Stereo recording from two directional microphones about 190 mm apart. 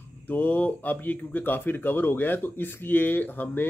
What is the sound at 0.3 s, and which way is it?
Speech, 10° left (ahead or behind).